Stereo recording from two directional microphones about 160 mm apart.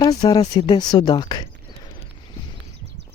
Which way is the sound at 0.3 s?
25° left (ahead or behind).